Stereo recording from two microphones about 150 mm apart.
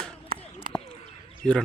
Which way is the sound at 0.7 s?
65° right (ahead or behind).